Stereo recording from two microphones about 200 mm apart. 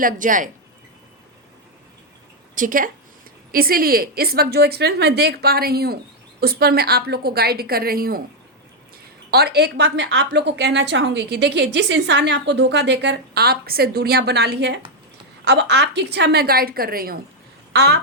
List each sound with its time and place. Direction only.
0.0 s speech: 40° right (ahead or behind)
2.6 s a woman's voice: 45° right (ahead or behind)
9.3 s a woman's voice: 55° right (ahead or behind)